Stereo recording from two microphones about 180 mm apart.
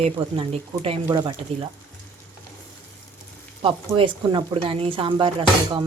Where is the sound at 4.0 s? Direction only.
25° right (ahead or behind).